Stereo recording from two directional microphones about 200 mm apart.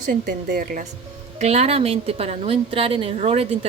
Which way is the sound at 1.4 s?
35° right (ahead or behind).